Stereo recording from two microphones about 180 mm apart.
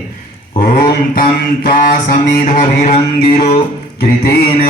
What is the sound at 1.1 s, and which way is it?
Music, 55° left (ahead or behind).